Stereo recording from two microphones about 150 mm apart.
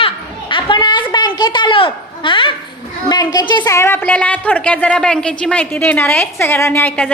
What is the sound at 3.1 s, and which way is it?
A woman's voice, 25° left (ahead or behind).